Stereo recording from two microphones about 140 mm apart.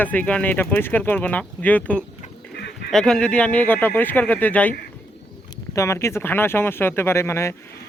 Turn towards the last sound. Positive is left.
turn(degrees=20)  # may be behind; listen again after turning